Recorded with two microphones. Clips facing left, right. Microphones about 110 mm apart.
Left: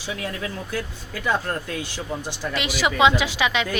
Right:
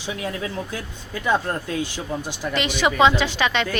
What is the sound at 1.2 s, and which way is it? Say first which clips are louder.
Speech: right 2 dB; 20° right (ahead or behind).